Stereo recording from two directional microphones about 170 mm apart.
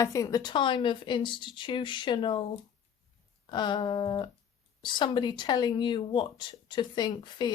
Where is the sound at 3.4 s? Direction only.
25° left (ahead or behind).